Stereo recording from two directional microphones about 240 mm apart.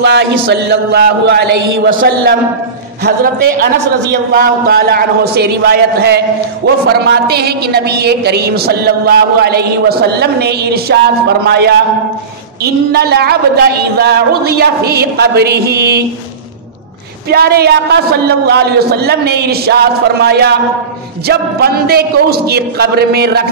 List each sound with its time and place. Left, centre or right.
0.0 s mantra: right
4.3 s a man's voice: right
17.3 s a man's voice: right